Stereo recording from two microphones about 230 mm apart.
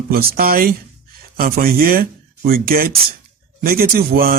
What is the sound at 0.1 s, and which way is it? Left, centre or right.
A man's voice, right.